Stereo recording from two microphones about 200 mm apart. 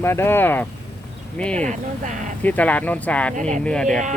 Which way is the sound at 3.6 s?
5° left (ahead or behind).